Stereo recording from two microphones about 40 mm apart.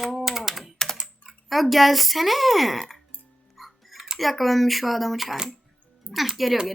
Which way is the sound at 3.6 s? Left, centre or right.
Centre.